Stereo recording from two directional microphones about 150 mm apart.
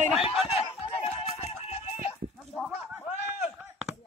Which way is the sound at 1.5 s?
40° left (ahead or behind).